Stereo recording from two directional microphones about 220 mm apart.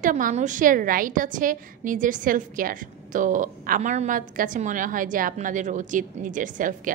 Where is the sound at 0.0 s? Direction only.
35° right (ahead or behind).